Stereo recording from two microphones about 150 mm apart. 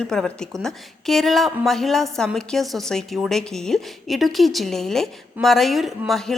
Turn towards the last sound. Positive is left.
turn(degrees=0)  # may be behind; listen again after turning